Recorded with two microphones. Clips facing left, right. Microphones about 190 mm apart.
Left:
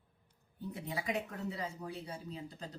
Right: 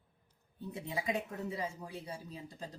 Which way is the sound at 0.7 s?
25° right (ahead or behind).